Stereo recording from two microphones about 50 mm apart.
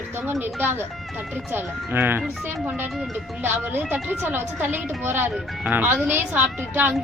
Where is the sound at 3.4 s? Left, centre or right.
Right.